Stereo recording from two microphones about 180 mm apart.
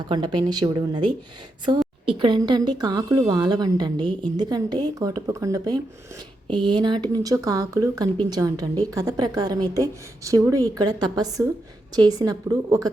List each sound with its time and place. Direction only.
0.1 s a woman's voice: 25° right (ahead or behind)